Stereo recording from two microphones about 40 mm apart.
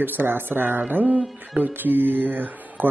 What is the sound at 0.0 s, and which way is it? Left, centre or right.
Speech, right.